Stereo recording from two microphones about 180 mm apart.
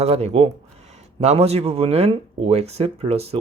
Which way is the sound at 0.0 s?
35° right (ahead or behind).